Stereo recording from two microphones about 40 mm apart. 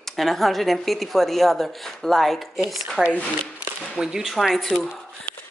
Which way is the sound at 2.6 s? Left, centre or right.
Centre.